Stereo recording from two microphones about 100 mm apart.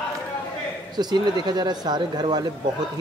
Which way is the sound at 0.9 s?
45° right (ahead or behind).